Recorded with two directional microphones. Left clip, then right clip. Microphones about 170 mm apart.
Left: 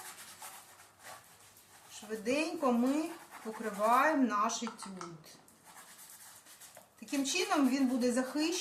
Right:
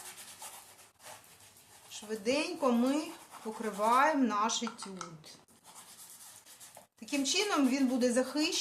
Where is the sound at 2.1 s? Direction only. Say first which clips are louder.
Right 1 dB; 40° right (ahead or behind).